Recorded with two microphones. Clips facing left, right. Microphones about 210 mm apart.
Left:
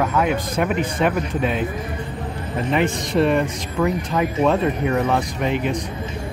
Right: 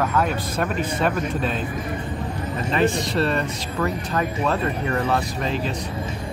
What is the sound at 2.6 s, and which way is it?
Speech, 15° left (ahead or behind).